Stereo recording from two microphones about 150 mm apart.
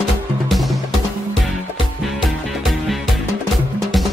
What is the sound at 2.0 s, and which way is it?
Music, centre (ahead or behind).